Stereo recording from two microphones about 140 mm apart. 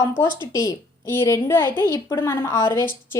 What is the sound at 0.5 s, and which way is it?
A woman's voice, 20° left (ahead or behind).